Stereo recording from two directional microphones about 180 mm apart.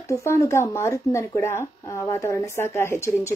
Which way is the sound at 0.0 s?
15° left (ahead or behind).